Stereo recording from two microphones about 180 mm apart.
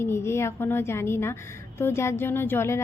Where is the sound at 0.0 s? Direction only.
15° left (ahead or behind).